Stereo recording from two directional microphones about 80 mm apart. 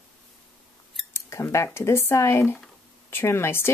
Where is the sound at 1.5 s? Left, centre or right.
Left.